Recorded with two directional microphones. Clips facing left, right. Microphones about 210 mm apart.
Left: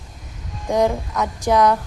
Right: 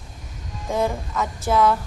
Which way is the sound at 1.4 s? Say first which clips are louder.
Left 3 dB; 15° left (ahead or behind).